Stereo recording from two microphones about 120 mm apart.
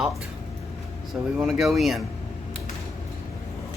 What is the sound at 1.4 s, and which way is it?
Speech, centre (ahead or behind).